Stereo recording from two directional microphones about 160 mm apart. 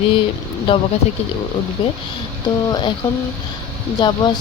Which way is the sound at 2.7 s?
25° left (ahead or behind).